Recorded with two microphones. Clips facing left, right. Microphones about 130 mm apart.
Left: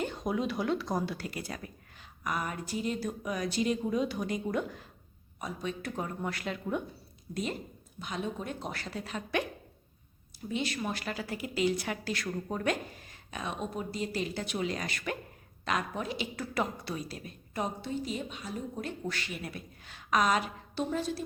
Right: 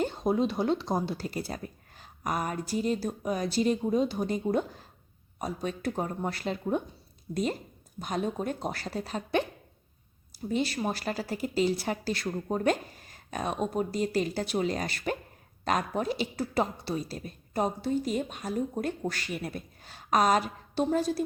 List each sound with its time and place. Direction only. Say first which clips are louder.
0.0 s a woman's voice: right 5 dB; 30° right (ahead or behind)
7.9 s a woman's voice: right 5 dB; 45° right (ahead or behind)